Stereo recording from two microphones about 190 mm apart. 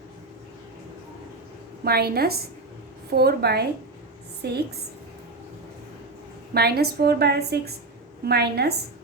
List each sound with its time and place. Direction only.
1.8 s a woman's voice: 55° right (ahead or behind)
6.5 s a woman's voice: 55° right (ahead or behind)